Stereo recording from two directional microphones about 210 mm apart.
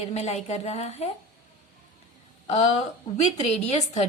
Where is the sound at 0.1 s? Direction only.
30° left (ahead or behind).